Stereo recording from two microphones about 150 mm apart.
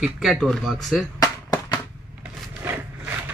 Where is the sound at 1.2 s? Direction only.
25° left (ahead or behind).